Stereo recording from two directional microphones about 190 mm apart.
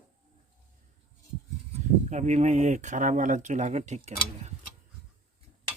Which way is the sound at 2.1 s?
40° right (ahead or behind).